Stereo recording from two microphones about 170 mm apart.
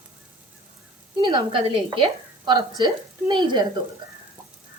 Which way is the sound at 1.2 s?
30° right (ahead or behind).